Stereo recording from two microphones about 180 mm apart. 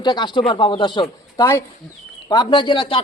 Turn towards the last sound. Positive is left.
turn(degrees=30)  # may be behind; listen again after turning